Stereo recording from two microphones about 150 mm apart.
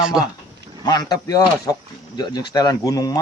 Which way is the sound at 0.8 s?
25° left (ahead or behind).